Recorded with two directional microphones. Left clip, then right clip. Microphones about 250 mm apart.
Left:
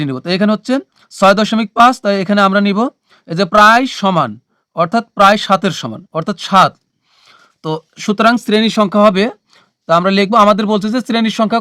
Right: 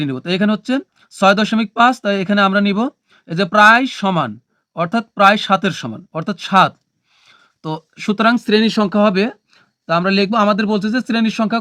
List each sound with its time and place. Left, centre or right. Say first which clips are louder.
0.0 s speech: left 3 dB; left